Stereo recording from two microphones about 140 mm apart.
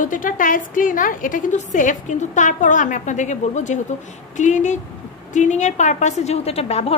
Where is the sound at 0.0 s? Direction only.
70° left (ahead or behind).